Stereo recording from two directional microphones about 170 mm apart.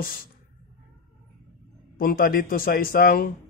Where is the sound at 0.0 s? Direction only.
60° left (ahead or behind).